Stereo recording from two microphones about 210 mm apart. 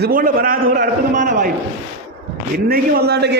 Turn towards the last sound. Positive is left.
turn(degrees=-50)  # may be behind; listen again after turning